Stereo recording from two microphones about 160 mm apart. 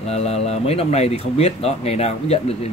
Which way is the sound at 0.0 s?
40° left (ahead or behind).